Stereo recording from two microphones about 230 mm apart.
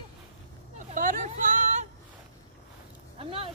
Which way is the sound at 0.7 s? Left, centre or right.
Right.